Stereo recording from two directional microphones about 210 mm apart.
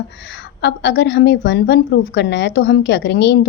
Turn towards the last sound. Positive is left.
turn(degrees=55)  # may be behind; listen again after turning